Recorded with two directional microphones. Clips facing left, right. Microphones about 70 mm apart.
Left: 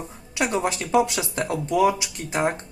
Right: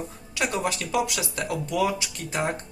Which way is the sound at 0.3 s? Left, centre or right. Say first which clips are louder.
Left 3 dB; left.